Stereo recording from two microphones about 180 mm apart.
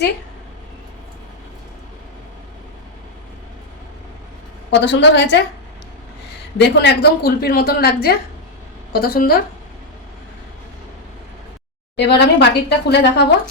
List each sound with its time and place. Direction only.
4.7 s a woman's voice: 75° left (ahead or behind)
6.6 s a woman's voice: 65° left (ahead or behind)
11.9 s a woman's voice: 70° left (ahead or behind)